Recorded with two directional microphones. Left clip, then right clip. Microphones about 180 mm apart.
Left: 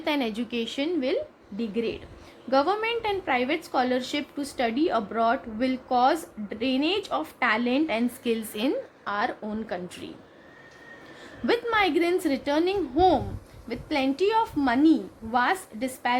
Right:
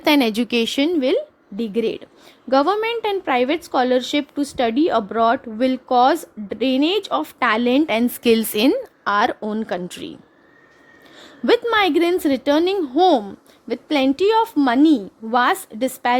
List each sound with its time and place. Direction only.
0.0 s a woman's voice: 55° right (ahead or behind)
11.4 s a woman's voice: 55° right (ahead or behind)